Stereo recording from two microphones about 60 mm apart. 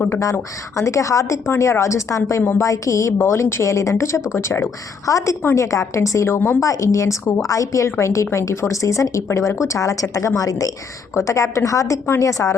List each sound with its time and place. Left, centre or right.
0.3 s speech: left
3.2 s speech: left
6.2 s speech: left
6.6 s speech: left
11.1 s speech: left